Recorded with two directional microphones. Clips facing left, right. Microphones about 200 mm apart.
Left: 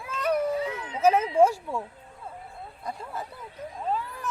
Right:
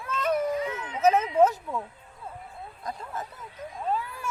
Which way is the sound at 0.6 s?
30° left (ahead or behind).